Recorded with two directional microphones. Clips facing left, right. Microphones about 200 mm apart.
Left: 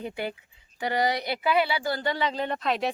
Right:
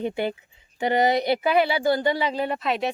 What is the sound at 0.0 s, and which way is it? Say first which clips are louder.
Speech: right 6 dB; 25° right (ahead or behind).